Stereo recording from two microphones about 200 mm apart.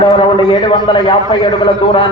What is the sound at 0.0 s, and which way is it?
A man's voice, 25° left (ahead or behind).